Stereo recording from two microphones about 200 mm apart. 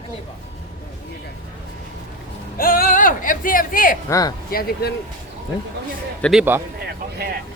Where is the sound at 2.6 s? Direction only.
45° left (ahead or behind).